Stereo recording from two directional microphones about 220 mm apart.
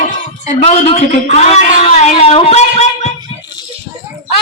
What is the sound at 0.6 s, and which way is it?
A man's voice, 30° left (ahead or behind).